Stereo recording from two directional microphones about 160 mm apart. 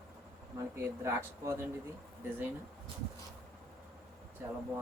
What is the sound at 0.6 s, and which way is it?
Speech, 15° right (ahead or behind).